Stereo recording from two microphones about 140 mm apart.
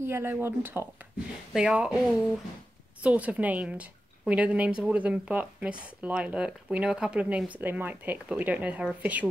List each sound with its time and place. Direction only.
0.0 s a woman's voice: 15° right (ahead or behind)